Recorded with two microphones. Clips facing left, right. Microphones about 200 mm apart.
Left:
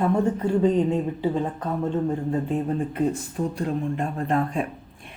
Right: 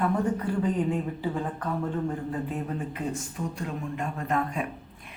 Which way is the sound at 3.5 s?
35° left (ahead or behind).